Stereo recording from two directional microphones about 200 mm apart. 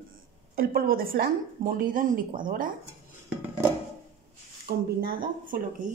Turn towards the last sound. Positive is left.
turn(degrees=-40)  # may be behind; listen again after turning